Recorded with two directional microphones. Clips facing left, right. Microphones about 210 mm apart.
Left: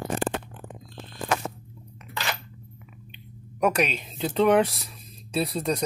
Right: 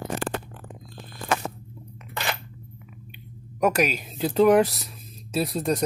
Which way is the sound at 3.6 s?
5° right (ahead or behind).